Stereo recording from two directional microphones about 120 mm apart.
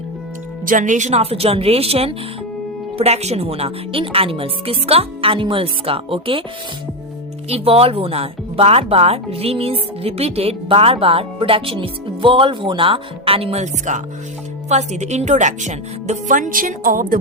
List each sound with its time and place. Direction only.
0.8 s speech: 90° right
1.2 s a woman's voice: 55° right (ahead or behind)
7.5 s a woman's voice: 55° right (ahead or behind); by 16.7 s 90° right